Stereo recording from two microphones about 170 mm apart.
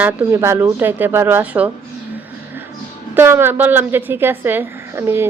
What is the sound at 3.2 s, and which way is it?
A woman's voice, 10° right (ahead or behind).